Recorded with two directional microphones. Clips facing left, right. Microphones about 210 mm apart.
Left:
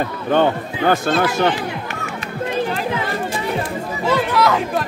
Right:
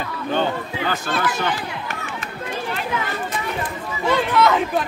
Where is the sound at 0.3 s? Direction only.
55° left (ahead or behind).